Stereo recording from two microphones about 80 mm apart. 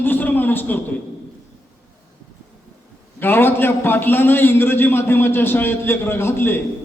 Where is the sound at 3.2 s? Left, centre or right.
Left.